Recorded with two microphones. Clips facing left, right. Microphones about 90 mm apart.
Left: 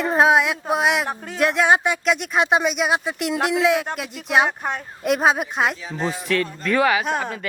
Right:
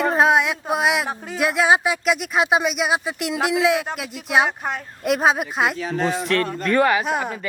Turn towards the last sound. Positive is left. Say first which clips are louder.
# right 1 dB
turn(degrees=-5)  # may be behind; listen again after turning